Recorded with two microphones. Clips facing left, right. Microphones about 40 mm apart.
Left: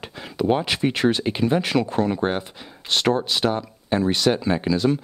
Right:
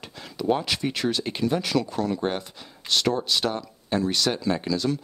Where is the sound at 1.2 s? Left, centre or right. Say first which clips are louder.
Left 4 dB; centre.